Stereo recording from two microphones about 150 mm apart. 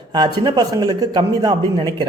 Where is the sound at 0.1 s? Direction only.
30° right (ahead or behind).